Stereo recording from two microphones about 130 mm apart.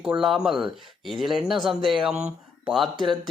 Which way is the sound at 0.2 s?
5° right (ahead or behind).